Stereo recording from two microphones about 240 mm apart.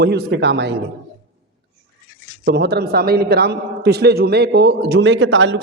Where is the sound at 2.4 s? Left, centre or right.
Right.